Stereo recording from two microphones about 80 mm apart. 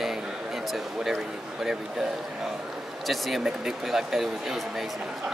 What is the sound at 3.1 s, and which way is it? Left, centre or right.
Speech, centre.